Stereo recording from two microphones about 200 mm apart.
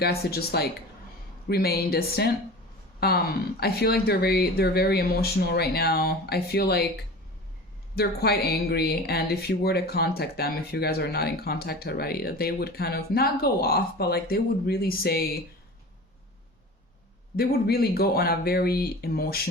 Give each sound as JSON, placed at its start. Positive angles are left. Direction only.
{"t": 0.0, "sound": "speech", "side_deg": 50}
{"t": 7.9, "sound": "speech", "side_deg": 50}
{"t": 17.3, "sound": "speech", "side_deg": 50}